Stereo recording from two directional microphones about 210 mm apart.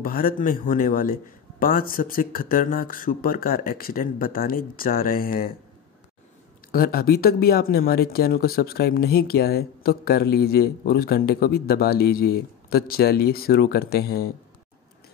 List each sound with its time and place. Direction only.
0.0 s a man's voice: 45° left (ahead or behind)
6.7 s speech: 45° left (ahead or behind)